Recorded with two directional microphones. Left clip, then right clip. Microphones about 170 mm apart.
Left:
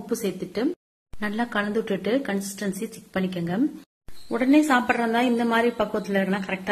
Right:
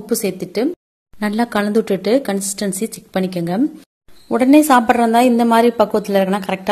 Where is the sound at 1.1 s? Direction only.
40° right (ahead or behind).